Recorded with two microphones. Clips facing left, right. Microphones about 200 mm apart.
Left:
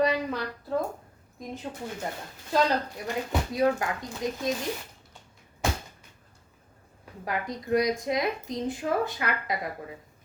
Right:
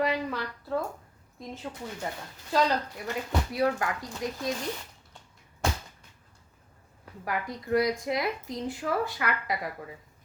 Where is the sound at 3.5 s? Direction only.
20° left (ahead or behind).